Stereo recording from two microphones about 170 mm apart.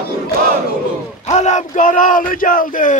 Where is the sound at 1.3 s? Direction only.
45° left (ahead or behind).